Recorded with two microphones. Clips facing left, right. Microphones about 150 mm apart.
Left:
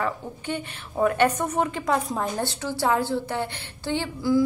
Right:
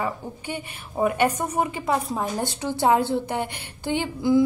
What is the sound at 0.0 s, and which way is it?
A woman's voice, 10° right (ahead or behind).